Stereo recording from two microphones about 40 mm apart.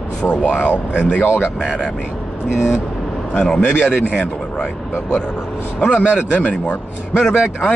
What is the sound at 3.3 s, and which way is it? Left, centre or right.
Speech, left.